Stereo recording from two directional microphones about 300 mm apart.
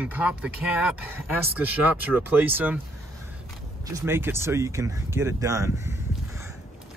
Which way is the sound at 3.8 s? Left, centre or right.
Centre.